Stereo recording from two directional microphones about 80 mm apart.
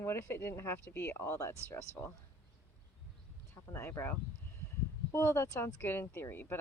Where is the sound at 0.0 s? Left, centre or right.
Left.